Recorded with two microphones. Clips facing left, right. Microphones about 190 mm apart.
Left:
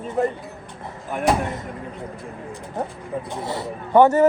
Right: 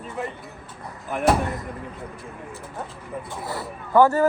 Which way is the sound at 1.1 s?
Centre (ahead or behind).